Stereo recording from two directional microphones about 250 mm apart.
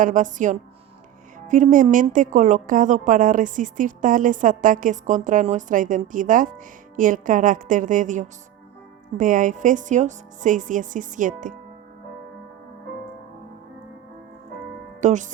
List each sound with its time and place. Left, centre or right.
0.0 s a woman's voice: right
15.0 s speech: right